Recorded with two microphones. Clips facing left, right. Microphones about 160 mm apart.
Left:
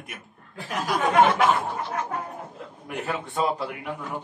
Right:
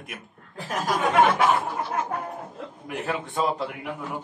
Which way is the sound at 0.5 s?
40° right (ahead or behind).